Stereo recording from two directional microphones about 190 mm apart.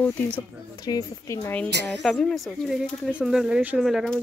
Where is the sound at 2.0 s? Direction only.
5° left (ahead or behind).